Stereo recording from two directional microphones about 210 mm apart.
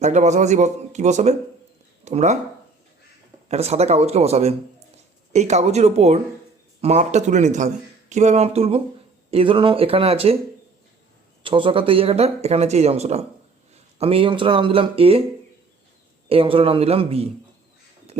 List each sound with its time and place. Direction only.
0.0 s a man's voice: 35° right (ahead or behind)
3.5 s a man's voice: 30° right (ahead or behind)
11.4 s speech: 25° right (ahead or behind)
16.3 s speech: 25° right (ahead or behind)
18.1 s a sound: 30° right (ahead or behind)